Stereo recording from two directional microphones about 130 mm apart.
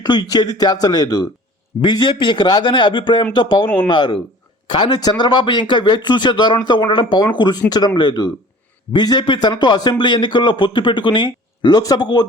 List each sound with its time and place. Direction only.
0.0 s speech: 35° left (ahead or behind)